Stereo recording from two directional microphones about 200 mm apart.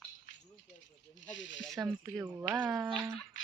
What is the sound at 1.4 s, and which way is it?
Speech, 65° left (ahead or behind).